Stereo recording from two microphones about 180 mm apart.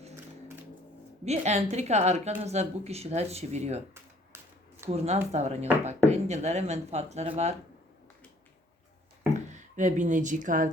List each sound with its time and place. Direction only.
1.2 s a woman's voice: 40° right (ahead or behind)
4.9 s a woman's voice: 35° right (ahead or behind)
9.3 s speech: 40° right (ahead or behind)